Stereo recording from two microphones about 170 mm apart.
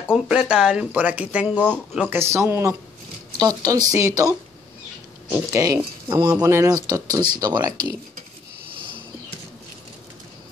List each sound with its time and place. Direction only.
0.1 s speech: 5° right (ahead or behind); by 4.4 s 20° right (ahead or behind)
5.5 s speech: 20° right (ahead or behind)